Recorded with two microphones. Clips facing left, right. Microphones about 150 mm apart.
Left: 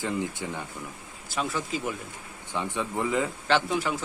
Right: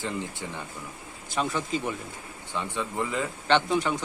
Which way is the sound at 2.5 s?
20° left (ahead or behind).